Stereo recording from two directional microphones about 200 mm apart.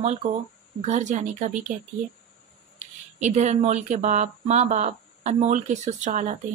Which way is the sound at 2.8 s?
35° right (ahead or behind).